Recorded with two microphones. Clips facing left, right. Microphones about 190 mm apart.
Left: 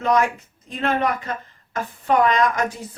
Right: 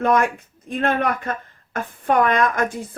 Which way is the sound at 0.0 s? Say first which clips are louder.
Right 1 dB; 55° right (ahead or behind).